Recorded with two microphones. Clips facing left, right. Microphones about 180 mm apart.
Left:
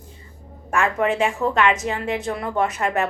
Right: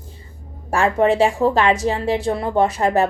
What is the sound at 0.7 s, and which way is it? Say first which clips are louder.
Speech: right 4 dB; 30° right (ahead or behind).